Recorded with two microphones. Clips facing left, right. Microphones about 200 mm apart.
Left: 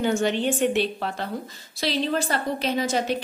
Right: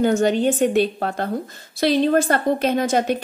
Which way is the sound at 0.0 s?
40° right (ahead or behind).